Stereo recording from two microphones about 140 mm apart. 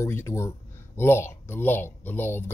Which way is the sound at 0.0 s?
20° left (ahead or behind).